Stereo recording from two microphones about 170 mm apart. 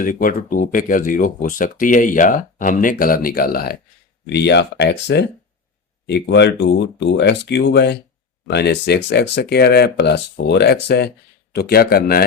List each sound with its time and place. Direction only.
0.0 s speech: 55° left (ahead or behind)
4.3 s a man's voice: 80° left; by 12.2 s 65° left (ahead or behind)